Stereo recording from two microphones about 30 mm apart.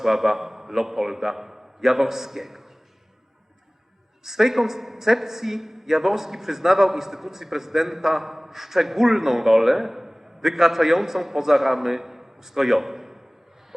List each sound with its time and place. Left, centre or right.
0.0 s a man's voice: centre
4.2 s a man's voice: centre